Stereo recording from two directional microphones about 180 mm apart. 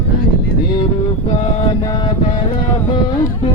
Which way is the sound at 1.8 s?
25° left (ahead or behind).